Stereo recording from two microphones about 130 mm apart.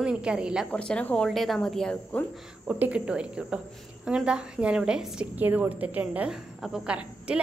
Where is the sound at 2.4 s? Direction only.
5° right (ahead or behind).